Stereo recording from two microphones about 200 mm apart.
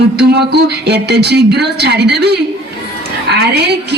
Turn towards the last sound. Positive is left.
turn(degrees=-55)  # may be behind; listen again after turning